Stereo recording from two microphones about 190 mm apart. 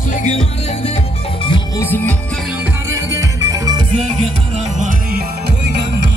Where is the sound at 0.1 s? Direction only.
40° left (ahead or behind).